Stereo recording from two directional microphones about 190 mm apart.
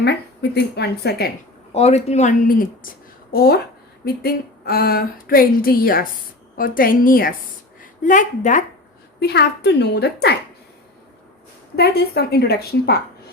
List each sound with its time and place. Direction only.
0.0 s a woman's voice: 60° left (ahead or behind)
1.7 s a woman's voice: 35° left (ahead or behind); by 3.6 s 55° left (ahead or behind)
4.0 s a sound: 55° left (ahead or behind)
7.8 s a woman's voice: 40° left (ahead or behind)
9.2 s a woman's voice: 60° left (ahead or behind)
11.8 s a woman's voice: 55° left (ahead or behind)